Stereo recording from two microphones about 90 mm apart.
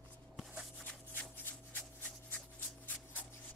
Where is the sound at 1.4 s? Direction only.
15° left (ahead or behind).